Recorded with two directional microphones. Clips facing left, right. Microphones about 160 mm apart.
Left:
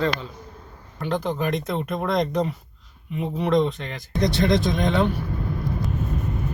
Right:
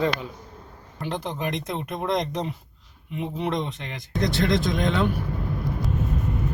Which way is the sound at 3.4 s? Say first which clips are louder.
Left 8 dB; 15° right (ahead or behind).